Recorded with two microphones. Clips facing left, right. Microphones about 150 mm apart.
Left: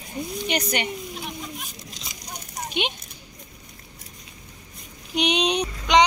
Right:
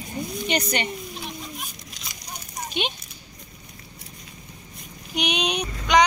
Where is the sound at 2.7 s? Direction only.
15° left (ahead or behind).